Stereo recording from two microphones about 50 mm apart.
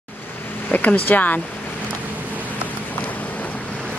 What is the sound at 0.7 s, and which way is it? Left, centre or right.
Speech, left.